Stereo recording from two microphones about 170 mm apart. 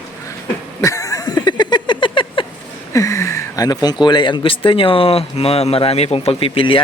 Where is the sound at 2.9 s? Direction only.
20° left (ahead or behind).